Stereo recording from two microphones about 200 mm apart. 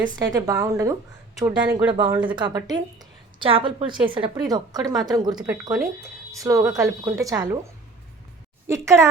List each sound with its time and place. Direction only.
0.0 s a woman's voice: 15° right (ahead or behind)